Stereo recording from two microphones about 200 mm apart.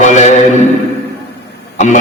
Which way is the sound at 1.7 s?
35° left (ahead or behind).